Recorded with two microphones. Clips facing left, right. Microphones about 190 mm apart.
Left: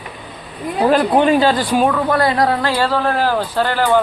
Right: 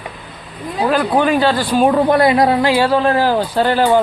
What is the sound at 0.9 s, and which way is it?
Speech, 25° left (ahead or behind).